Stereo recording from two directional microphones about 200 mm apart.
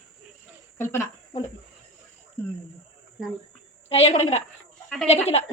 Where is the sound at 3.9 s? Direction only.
30° left (ahead or behind).